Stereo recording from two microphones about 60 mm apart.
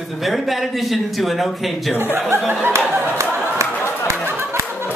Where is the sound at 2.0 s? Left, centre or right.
Right.